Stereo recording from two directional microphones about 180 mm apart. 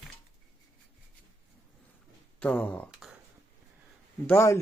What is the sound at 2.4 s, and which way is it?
Speech, 10° left (ahead or behind).